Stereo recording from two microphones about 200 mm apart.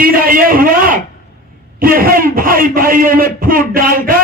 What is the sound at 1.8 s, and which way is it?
A man's voice, 45° right (ahead or behind).